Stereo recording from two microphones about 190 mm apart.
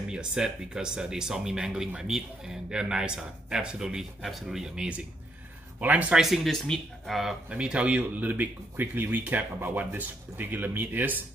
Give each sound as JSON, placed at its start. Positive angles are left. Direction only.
{"t": 0.1, "sound": "speech", "side_deg": -5}